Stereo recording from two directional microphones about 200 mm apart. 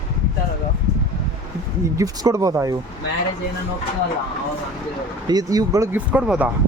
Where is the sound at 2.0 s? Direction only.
15° right (ahead or behind).